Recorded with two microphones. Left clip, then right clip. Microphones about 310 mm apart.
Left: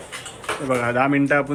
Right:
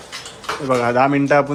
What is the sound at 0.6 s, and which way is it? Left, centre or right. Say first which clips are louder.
Speech: right 5 dB; centre.